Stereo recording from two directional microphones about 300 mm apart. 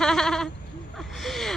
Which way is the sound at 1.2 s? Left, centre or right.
Centre.